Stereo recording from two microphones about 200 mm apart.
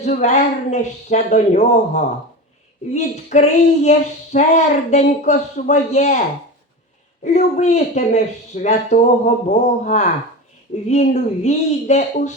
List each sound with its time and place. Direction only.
0.0 s speech: 35° left (ahead or behind)
7.3 s speech: 35° left (ahead or behind)